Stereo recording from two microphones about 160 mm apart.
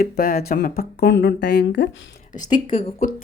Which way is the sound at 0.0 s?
70° left (ahead or behind).